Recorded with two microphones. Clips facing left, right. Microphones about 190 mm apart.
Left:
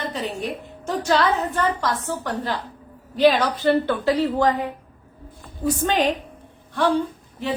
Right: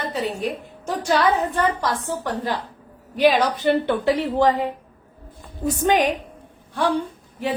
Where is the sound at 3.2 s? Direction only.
10° right (ahead or behind).